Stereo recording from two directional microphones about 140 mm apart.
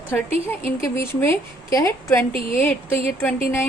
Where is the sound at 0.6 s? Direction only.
20° left (ahead or behind).